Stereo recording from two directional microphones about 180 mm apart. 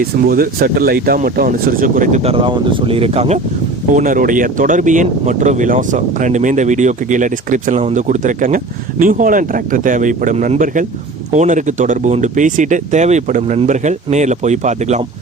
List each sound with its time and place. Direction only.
0.0 s speech: 55° right (ahead or behind); by 3.4 s 35° right (ahead or behind)
3.9 s speech: 50° right (ahead or behind)